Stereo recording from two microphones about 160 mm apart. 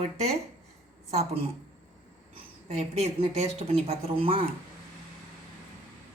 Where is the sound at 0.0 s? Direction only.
40° right (ahead or behind).